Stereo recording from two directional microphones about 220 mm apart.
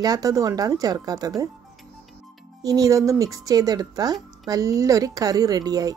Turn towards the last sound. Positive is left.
turn(degrees=-15)  # may be behind; listen again after turning